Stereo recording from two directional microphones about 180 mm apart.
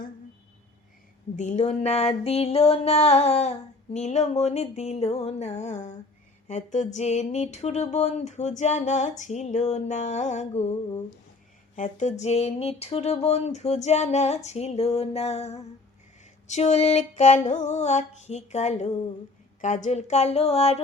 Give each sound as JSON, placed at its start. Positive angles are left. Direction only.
{"t": 1.4, "sound": "music", "side_deg": 40}